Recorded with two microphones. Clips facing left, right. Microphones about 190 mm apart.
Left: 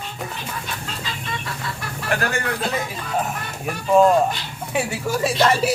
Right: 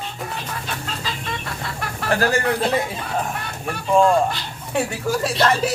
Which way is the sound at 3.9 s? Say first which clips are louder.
Left 2 dB; 5° left (ahead or behind).